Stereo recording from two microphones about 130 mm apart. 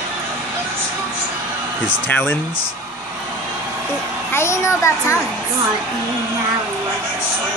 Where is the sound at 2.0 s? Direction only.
15° left (ahead or behind).